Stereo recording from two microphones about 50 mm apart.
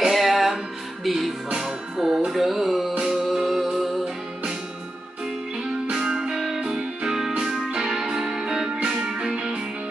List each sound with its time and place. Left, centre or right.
0.1 s music: centre
5.9 s music: centre